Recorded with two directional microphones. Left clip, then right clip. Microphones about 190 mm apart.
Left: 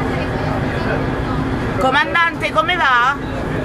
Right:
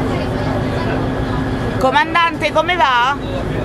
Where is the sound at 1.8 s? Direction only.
20° right (ahead or behind).